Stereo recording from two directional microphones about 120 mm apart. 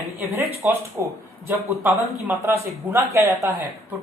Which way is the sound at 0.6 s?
15° right (ahead or behind).